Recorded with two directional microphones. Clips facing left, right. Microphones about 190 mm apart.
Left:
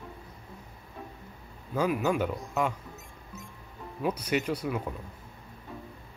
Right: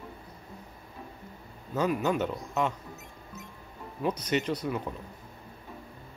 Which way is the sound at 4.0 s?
10° left (ahead or behind).